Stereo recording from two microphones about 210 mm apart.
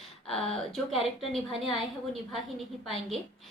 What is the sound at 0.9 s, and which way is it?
Speech, 25° left (ahead or behind).